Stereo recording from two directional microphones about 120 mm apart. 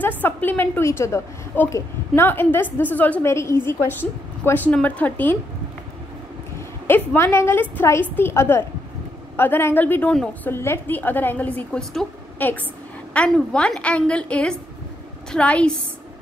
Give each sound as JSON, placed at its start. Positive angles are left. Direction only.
{"t": 0.2, "sound": "a woman's voice", "side_deg": 15}
{"t": 7.2, "sound": "a woman's voice", "side_deg": 20}
{"t": 10.5, "sound": "a woman's voice", "side_deg": 20}